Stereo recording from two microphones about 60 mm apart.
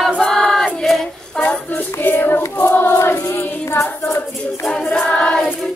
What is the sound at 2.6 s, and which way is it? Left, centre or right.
Choir, left.